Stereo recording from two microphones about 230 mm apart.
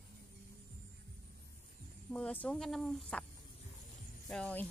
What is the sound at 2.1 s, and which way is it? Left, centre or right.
Speech, centre.